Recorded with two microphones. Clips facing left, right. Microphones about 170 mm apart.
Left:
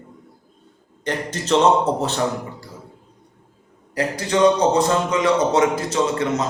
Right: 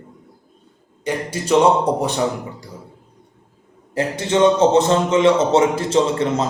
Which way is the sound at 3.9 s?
25° right (ahead or behind).